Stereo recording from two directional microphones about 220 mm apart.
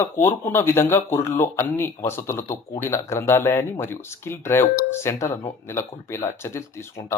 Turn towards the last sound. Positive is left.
turn(degrees=15)  # may be behind; listen again after turning